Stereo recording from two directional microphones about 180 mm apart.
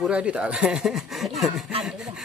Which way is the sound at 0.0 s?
5° right (ahead or behind).